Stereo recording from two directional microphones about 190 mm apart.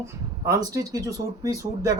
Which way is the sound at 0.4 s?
15° right (ahead or behind).